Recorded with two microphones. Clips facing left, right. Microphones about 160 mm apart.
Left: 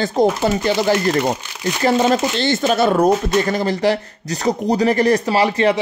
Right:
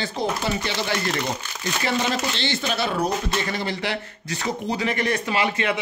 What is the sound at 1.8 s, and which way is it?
Speech, 45° left (ahead or behind).